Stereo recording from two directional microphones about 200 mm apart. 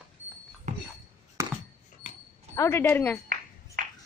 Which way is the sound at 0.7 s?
35° right (ahead or behind).